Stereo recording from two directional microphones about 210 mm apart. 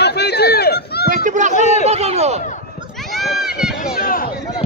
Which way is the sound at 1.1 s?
35° right (ahead or behind).